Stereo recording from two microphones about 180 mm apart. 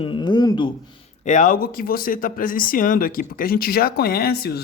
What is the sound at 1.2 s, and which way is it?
Speech, 45° left (ahead or behind).